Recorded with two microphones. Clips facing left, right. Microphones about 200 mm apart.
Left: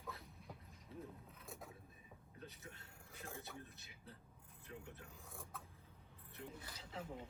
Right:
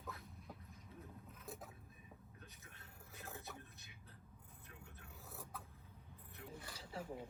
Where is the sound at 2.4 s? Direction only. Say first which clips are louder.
Left 6 dB; 30° left (ahead or behind).